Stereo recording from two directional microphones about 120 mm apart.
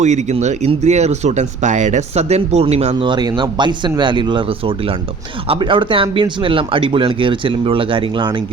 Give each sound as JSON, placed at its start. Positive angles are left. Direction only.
{"t": 0.0, "sound": "speech", "side_deg": -70}
{"t": 3.0, "sound": "speech", "side_deg": -40}